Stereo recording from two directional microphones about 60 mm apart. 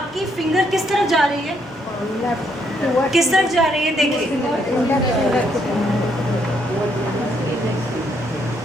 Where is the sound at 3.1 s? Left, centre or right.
Centre.